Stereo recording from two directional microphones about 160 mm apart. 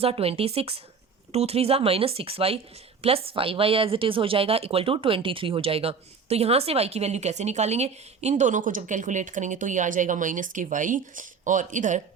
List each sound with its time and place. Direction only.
0.0 s speech: 40° right (ahead or behind)